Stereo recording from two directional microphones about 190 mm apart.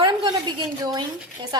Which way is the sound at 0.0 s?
20° right (ahead or behind).